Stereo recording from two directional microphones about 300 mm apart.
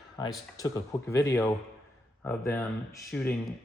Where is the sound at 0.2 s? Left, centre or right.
Centre.